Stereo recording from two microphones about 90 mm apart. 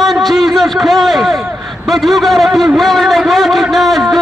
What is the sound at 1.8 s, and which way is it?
A man's voice, centre (ahead or behind).